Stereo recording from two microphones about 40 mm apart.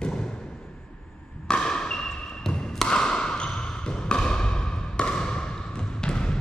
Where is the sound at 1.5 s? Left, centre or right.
Left.